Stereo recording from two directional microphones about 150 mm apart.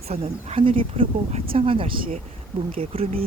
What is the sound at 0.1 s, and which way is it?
Speech, 40° right (ahead or behind).